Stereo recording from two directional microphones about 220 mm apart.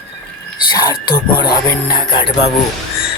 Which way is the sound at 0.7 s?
20° left (ahead or behind).